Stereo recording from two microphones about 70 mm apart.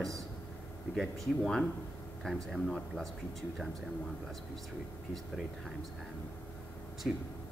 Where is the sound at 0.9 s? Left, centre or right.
Centre.